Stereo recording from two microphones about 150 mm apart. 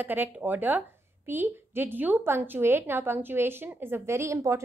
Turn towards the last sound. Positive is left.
turn(degrees=-20)  # may be behind; listen again after turning